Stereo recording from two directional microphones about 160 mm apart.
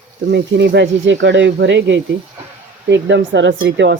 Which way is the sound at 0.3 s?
90° right.